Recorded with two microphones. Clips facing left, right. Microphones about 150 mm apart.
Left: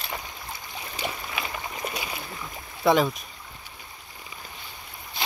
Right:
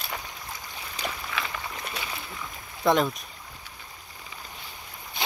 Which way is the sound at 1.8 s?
10° left (ahead or behind).